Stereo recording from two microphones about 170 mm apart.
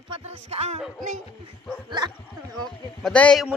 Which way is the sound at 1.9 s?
25° right (ahead or behind).